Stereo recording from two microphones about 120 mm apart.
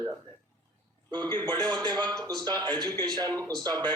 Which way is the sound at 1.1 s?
35° right (ahead or behind).